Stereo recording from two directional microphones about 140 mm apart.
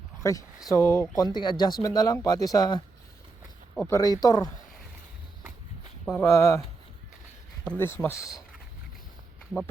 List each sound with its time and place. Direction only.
0.2 s speech: 20° left (ahead or behind)
6.1 s speech: 20° left (ahead or behind)
7.8 s speech: 15° left (ahead or behind)